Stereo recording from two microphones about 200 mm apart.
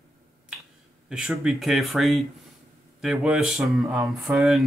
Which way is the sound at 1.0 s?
5° right (ahead or behind).